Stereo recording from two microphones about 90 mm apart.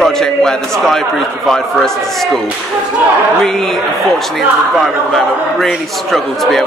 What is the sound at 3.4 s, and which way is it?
Speech, 5° left (ahead or behind).